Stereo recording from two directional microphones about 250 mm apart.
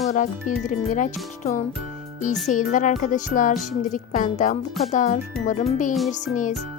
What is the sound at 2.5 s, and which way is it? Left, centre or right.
A woman's voice, left.